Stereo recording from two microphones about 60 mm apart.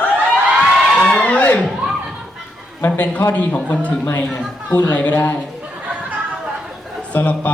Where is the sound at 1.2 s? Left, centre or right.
Left.